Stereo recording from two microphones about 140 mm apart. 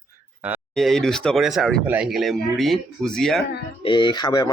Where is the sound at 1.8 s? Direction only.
10° right (ahead or behind).